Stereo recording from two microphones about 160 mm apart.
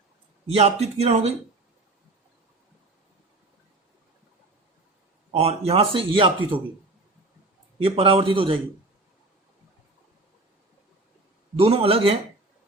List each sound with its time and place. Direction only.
0.4 s speech: 40° right (ahead or behind)
5.3 s speech: 40° right (ahead or behind)
7.8 s speech: 35° right (ahead or behind)
11.5 s speech: 35° right (ahead or behind)